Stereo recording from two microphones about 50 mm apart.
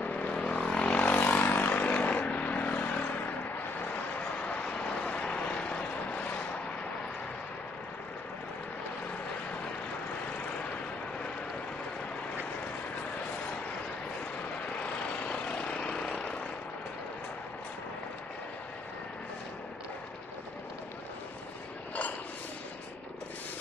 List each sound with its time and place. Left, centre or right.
0.0 s vehicle: left
1.3 s vehicle: left
15.2 s vehicle: left